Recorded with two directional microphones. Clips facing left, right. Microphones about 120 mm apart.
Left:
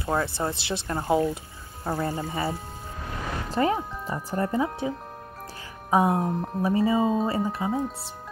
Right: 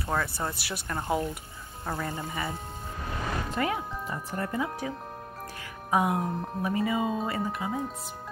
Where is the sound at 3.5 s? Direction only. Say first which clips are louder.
Left 8 dB; 30° left (ahead or behind).